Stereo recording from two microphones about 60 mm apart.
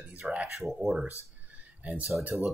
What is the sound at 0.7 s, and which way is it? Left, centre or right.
Speech, centre.